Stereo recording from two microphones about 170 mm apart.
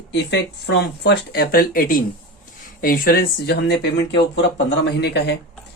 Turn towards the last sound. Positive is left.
turn(degrees=80)